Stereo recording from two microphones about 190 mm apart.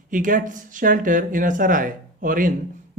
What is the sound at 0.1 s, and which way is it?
Speech, 45° right (ahead or behind).